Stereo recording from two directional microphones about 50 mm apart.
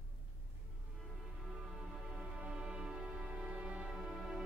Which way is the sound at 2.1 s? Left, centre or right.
Centre.